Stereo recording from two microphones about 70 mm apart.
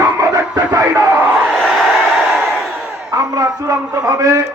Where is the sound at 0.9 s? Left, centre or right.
Right.